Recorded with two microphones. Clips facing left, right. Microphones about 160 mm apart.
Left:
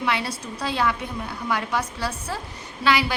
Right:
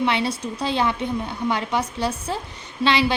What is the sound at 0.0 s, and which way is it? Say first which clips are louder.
A woman's voice: right 4 dB; 25° right (ahead or behind).